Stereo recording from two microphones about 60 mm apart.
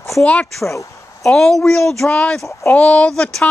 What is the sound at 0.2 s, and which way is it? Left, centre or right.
Speech, left.